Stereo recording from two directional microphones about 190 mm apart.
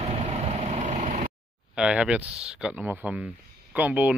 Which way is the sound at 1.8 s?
5° right (ahead or behind).